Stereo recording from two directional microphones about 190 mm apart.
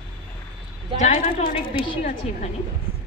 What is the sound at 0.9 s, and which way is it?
Speech, 45° left (ahead or behind).